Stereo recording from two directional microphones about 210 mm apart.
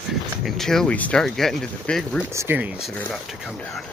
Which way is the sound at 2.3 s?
10° right (ahead or behind).